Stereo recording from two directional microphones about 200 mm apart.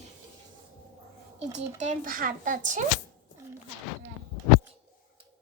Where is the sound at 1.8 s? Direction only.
40° right (ahead or behind).